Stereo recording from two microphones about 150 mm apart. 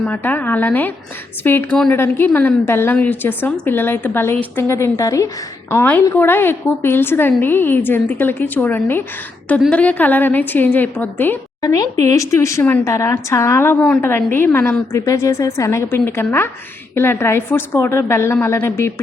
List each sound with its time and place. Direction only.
0.0 s a woman's voice: 10° left (ahead or behind)